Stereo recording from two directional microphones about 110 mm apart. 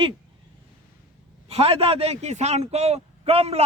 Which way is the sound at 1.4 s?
65° right (ahead or behind).